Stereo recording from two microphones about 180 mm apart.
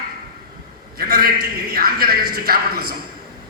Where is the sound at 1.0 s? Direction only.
55° right (ahead or behind).